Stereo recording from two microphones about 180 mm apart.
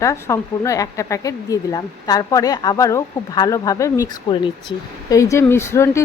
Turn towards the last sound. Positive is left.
turn(degrees=15)  # may be behind; listen again after turning